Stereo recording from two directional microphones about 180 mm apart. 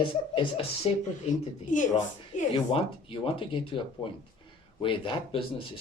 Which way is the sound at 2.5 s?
30° left (ahead or behind).